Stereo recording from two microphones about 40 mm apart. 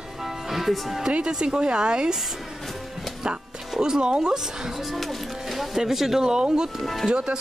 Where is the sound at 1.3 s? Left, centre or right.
Right.